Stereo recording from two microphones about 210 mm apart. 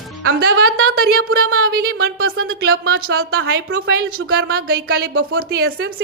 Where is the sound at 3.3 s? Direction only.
50° right (ahead or behind).